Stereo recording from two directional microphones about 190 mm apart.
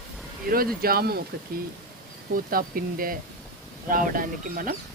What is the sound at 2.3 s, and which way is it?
Speech, 50° right (ahead or behind).